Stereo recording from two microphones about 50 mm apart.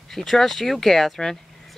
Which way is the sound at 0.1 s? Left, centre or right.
Centre.